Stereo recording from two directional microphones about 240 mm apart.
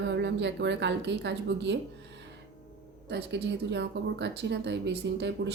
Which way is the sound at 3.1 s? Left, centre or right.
Right.